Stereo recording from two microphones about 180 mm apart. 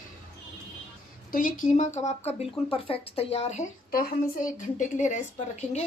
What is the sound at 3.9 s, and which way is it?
A woman's voice, 55° left (ahead or behind).